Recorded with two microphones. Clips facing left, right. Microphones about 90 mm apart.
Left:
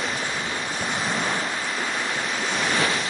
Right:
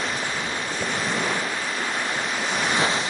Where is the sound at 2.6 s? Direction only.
20° right (ahead or behind).